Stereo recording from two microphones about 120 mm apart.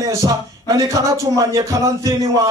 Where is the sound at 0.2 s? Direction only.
30° right (ahead or behind).